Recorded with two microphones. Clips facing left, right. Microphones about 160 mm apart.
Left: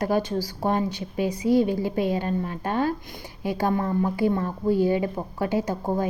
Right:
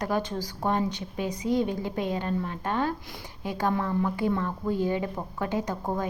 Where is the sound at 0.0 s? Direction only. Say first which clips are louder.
Left 5 dB; 10° left (ahead or behind).